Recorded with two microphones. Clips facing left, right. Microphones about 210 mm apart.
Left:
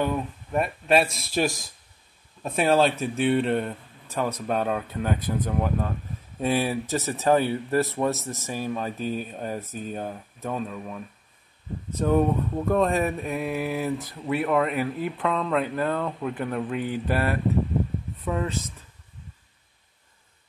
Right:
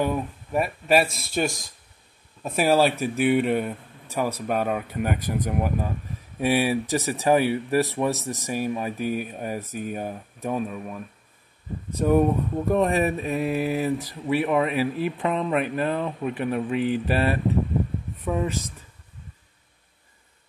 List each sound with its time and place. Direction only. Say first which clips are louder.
0.0 s speech: right 1 dB; 5° right (ahead or behind)
18.2 s speech: right 2 dB; 5° right (ahead or behind)